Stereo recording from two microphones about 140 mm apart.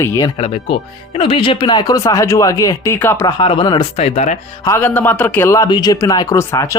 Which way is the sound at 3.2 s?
30° left (ahead or behind).